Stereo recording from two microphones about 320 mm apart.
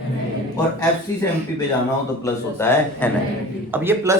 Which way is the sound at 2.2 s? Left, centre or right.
Centre.